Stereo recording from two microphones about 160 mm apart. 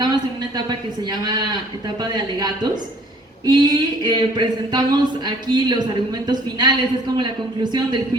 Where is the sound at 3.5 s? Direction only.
25° right (ahead or behind).